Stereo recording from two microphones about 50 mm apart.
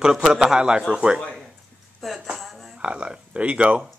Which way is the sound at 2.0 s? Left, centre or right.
Centre.